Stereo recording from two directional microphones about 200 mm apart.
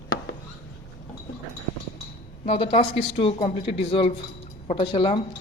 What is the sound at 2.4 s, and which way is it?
A woman's voice, 30° left (ahead or behind).